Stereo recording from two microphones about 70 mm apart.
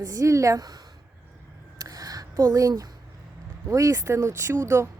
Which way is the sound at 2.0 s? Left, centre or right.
Right.